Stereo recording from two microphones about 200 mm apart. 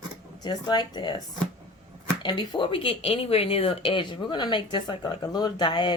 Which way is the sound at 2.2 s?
20° left (ahead or behind).